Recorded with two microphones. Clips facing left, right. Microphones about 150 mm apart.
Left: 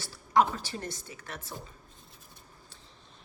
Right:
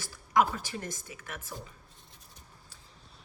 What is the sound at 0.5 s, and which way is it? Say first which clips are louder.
Speech: even; 30° left (ahead or behind).